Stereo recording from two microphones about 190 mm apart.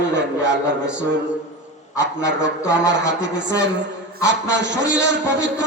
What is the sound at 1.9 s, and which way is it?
A man's voice, 70° right (ahead or behind).